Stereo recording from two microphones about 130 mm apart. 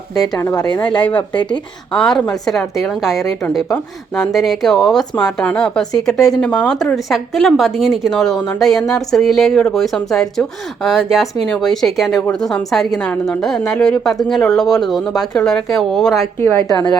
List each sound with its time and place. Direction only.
0.3 s speech: 25° left (ahead or behind)
2.0 s speech: 5° left (ahead or behind)
16.6 s a woman's voice: 30° left (ahead or behind)